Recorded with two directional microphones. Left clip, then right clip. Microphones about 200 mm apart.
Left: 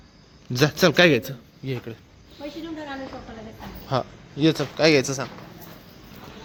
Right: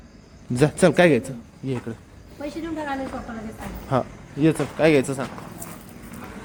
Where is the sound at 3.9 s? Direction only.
10° right (ahead or behind).